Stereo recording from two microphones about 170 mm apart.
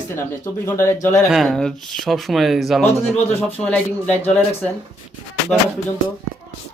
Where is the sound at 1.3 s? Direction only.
Centre (ahead or behind).